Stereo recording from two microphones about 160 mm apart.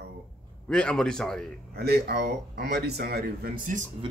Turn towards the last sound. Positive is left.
turn(degrees=-60)  # may be behind; listen again after turning